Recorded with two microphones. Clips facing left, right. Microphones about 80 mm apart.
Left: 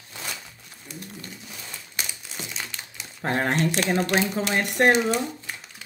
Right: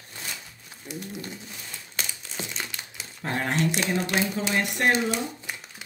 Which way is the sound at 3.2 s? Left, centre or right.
Left.